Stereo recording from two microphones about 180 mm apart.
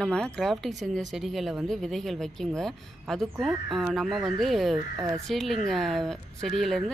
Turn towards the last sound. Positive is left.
turn(degrees=0)  # may be behind; listen again after turning